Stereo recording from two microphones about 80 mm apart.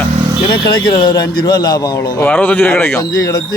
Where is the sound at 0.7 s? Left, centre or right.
Left.